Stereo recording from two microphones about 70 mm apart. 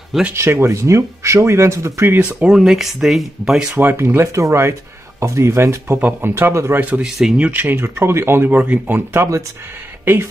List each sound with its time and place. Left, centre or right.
0.3 s speech: right
2.1 s speech: centre
2.5 s speech: centre
3.7 s speech: right
5.9 s speech: right
6.3 s speech: right
6.8 s speech: centre
7.1 s speech: centre
7.3 s speech: centre
7.6 s speech: right